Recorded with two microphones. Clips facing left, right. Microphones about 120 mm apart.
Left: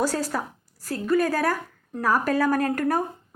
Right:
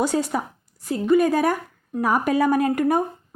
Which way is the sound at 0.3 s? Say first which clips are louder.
Right 3 dB; 15° right (ahead or behind).